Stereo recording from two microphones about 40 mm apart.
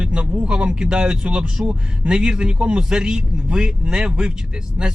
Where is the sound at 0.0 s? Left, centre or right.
Right.